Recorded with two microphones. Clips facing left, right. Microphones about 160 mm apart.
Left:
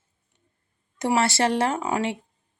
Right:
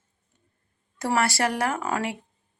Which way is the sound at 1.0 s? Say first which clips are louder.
Left 2 dB; 20° left (ahead or behind).